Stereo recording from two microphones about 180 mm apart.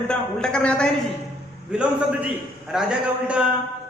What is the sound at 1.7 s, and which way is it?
A man's voice, 5° right (ahead or behind).